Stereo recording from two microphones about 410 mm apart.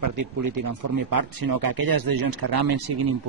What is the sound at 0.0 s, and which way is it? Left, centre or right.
Speech, right.